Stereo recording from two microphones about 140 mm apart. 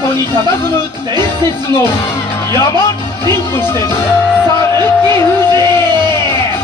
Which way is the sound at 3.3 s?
15° left (ahead or behind).